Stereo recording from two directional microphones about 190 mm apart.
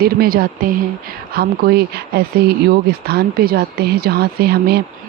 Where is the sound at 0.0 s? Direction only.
50° right (ahead or behind).